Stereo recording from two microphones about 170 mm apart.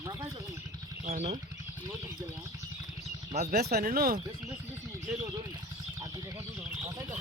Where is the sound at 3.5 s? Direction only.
65° right (ahead or behind).